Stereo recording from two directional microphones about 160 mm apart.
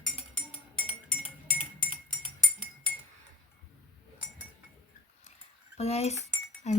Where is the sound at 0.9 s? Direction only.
40° left (ahead or behind).